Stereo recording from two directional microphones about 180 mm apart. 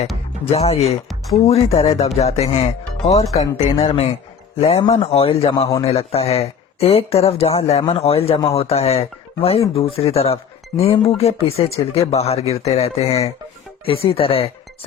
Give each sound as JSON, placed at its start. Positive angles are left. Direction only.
{"t": 0.5, "sound": "a man's voice", "side_deg": 35}